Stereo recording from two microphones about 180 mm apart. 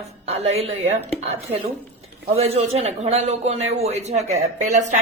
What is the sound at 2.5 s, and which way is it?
Speech, 35° right (ahead or behind).